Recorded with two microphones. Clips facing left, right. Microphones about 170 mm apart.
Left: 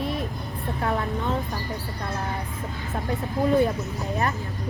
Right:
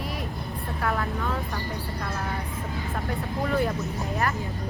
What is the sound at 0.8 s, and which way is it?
Speech, 25° left (ahead or behind).